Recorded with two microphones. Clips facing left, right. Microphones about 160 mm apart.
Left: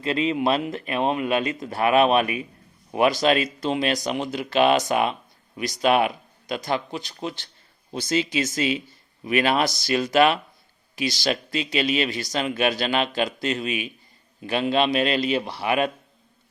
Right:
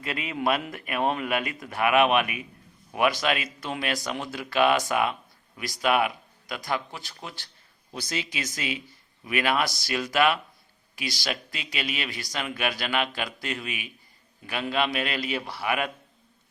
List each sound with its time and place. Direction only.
0.0 s speech: 25° left (ahead or behind)